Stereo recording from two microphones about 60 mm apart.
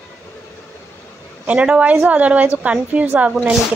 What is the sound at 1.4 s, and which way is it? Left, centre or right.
A woman's voice, right.